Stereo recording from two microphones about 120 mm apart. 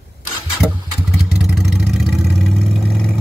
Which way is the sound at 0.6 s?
15° left (ahead or behind).